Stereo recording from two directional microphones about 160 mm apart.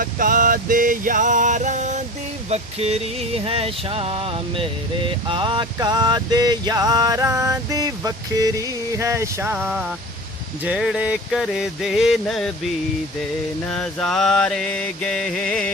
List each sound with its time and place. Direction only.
0.0 s music: 55° right (ahead or behind)
2.5 s a sound: 40° right (ahead or behind); by 9.8 s 15° right (ahead or behind)
10.6 s mantra: 5° right (ahead or behind)
13.7 s mantra: 5° left (ahead or behind)